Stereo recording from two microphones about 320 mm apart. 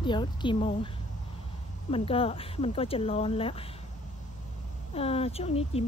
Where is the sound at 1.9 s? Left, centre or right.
Centre.